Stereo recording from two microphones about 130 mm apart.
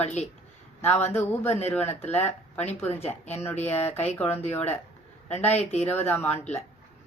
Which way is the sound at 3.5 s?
55° left (ahead or behind).